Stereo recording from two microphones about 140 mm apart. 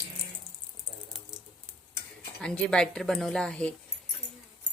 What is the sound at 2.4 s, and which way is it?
Speech, 5° left (ahead or behind).